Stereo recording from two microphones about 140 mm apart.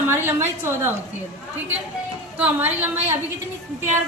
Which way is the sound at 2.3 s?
10° right (ahead or behind).